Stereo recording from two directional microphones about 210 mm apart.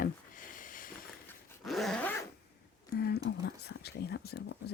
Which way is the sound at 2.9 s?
50° left (ahead or behind).